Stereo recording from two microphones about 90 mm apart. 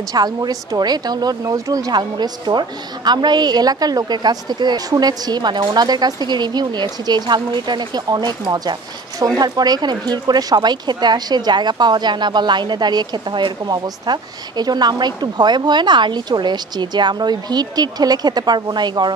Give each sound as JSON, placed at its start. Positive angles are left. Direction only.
{"t": 0.1, "sound": "speech", "side_deg": -45}
{"t": 5.9, "sound": "speech", "side_deg": -50}
{"t": 9.4, "sound": "speech", "side_deg": -50}